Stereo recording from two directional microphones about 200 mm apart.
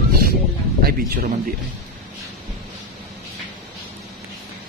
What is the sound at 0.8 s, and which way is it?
Speech, 50° right (ahead or behind).